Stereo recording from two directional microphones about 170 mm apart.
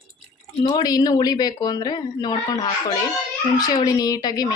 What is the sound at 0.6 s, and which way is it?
A woman's voice, 25° left (ahead or behind).